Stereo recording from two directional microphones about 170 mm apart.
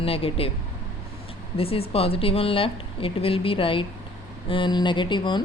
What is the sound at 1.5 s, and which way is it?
A woman's voice, 35° left (ahead or behind).